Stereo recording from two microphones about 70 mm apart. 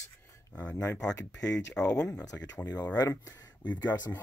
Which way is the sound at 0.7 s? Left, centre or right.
Left.